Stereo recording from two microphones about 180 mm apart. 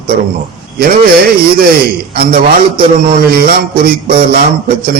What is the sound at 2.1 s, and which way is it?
Speech, 55° right (ahead or behind).